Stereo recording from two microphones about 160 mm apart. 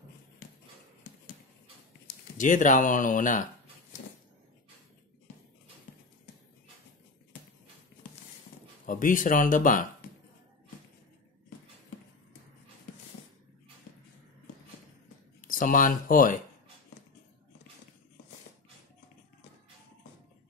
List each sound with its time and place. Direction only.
2.3 s speech: 55° left (ahead or behind)
8.8 s speech: 55° left (ahead or behind)
15.4 s speech: 60° left (ahead or behind)